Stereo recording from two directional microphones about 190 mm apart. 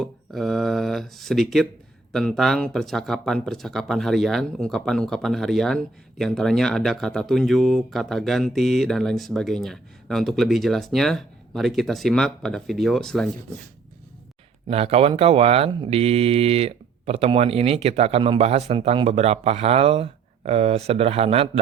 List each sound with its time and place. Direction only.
0.0 s speech: centre (ahead or behind)
14.7 s speech: 30° right (ahead or behind)